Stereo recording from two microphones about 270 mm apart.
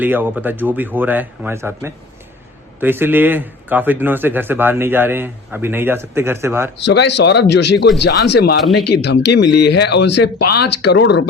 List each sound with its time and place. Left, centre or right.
0.0 s a man's voice: centre
6.8 s speech: left